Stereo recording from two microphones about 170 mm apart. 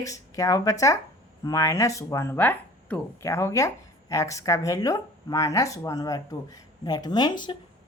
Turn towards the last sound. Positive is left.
turn(degrees=25)  # may be behind; listen again after turning